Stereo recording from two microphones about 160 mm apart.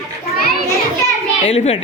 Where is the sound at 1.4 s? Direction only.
40° left (ahead or behind).